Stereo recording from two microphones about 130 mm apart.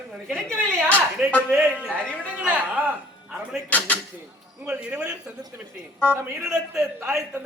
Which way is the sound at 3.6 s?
10° left (ahead or behind).